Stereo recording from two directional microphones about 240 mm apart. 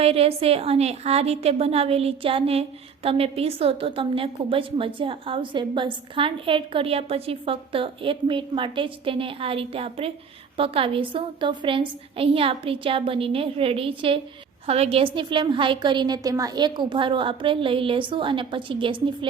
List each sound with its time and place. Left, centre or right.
0.0 s a woman's voice: right